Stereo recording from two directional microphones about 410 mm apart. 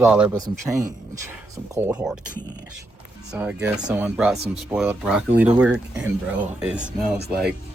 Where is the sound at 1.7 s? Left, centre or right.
Centre.